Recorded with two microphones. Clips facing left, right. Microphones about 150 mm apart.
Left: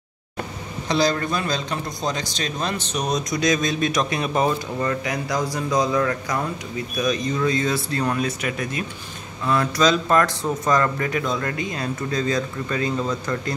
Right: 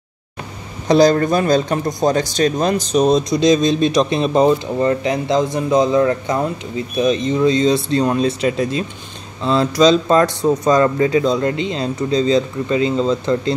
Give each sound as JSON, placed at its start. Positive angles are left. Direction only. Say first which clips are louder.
{"t": 0.8, "sound": "speech", "louder": "right 9 dB", "side_deg": -45}